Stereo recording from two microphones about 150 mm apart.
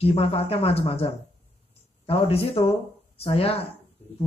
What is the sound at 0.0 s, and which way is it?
Speech, 40° left (ahead or behind).